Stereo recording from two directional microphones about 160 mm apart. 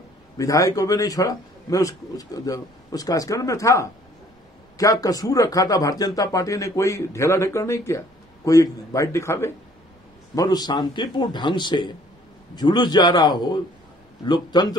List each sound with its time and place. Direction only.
0.4 s a man's voice: 20° left (ahead or behind)